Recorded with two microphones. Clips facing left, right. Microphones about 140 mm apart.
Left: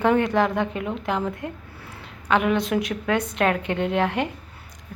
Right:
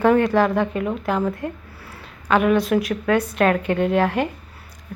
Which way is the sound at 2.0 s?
20° left (ahead or behind).